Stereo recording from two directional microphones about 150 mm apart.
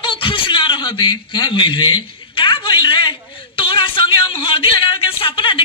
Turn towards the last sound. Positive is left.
turn(degrees=35)  # may be behind; listen again after turning